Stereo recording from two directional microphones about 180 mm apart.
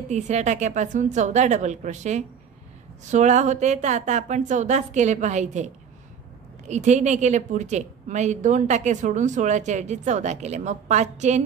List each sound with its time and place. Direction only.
0.1 s a woman's voice: 40° right (ahead or behind)
6.7 s a woman's voice: 40° right (ahead or behind)